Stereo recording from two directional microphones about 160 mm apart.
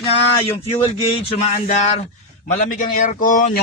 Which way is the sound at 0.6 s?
35° left (ahead or behind).